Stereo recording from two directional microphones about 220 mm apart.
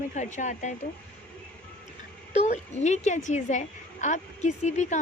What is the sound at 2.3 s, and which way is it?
A woman's voice, 30° left (ahead or behind).